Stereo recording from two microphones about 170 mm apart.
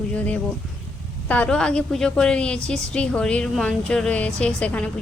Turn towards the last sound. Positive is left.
turn(degrees=5)  # may be behind; listen again after turning